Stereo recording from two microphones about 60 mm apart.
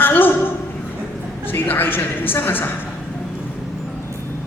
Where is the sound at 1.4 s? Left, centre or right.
Left.